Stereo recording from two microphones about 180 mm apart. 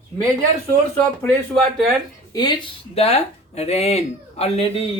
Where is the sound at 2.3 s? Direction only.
25° left (ahead or behind).